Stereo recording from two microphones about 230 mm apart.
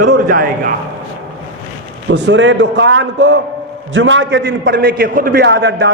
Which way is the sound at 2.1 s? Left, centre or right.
Right.